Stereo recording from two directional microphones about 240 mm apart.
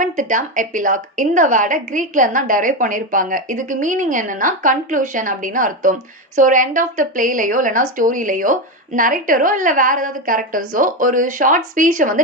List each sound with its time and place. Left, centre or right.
0.0 s a woman's voice: right